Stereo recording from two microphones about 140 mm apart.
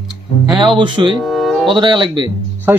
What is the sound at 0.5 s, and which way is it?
Speech, 35° right (ahead or behind).